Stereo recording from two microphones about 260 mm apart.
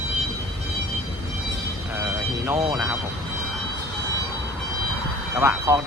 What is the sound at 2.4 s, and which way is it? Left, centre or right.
Speech, centre.